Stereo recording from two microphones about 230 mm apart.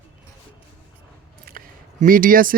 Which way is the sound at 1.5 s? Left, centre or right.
Right.